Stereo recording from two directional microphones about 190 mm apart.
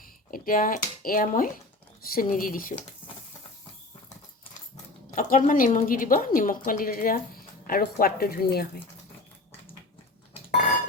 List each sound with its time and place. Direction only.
0.0 s a woman's voice: 45° left (ahead or behind)
5.1 s a woman's voice: 45° left (ahead or behind)